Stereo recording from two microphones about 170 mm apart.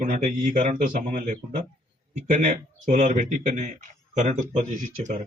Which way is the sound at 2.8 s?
50° right (ahead or behind).